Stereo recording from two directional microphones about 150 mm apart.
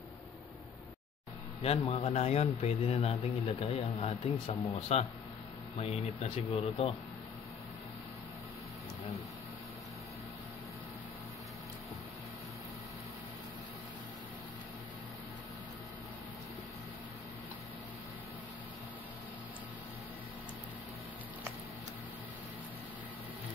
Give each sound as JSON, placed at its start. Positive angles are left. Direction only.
{"t": 1.6, "sound": "a man's voice", "side_deg": 40}